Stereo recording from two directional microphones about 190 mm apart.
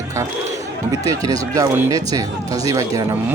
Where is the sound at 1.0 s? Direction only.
15° right (ahead or behind).